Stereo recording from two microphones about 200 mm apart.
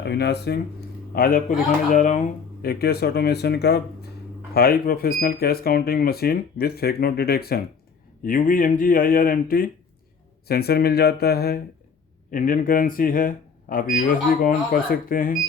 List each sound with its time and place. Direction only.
0.0 s speech: 55° left (ahead or behind)